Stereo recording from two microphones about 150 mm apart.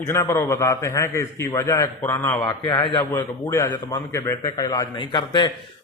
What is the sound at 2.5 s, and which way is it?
A man's voice, 30° left (ahead or behind).